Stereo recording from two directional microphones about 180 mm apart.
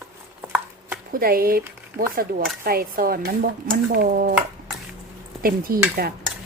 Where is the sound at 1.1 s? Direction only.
55° right (ahead or behind).